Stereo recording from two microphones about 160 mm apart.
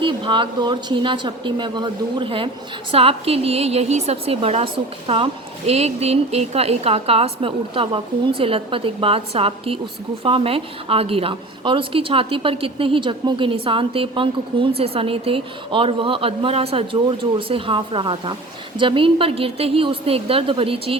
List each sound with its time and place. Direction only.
0.0 s a woman's voice: 30° right (ahead or behind)